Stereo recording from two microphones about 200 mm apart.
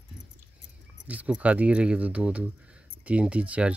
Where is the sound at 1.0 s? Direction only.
5° right (ahead or behind).